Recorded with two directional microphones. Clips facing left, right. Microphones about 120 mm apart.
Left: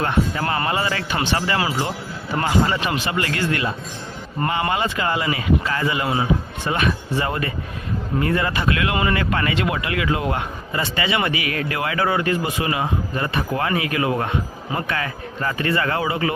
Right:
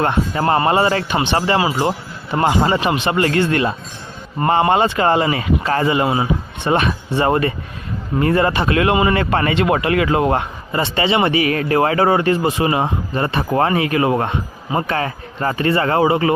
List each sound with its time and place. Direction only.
0.0 s speech: 35° right (ahead or behind)
1.1 s speech: 20° right (ahead or behind)
1.4 s speech: 35° right (ahead or behind)
3.1 s speech: 35° right (ahead or behind)